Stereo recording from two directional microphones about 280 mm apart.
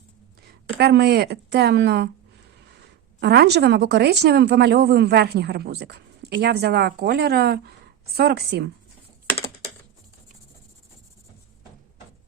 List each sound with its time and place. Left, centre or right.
0.4 s speech: right
3.2 s a woman's voice: right